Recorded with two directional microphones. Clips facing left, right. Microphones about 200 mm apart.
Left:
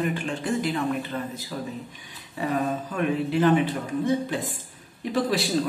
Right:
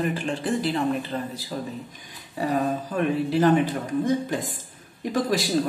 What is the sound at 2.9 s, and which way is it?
Speech, 40° right (ahead or behind).